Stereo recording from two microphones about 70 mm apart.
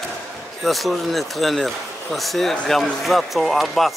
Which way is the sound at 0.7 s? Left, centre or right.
Centre.